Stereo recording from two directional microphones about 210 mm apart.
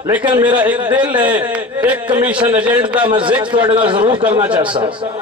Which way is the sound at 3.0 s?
25° right (ahead or behind).